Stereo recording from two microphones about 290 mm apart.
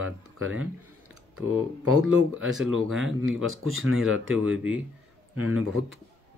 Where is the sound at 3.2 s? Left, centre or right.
Right.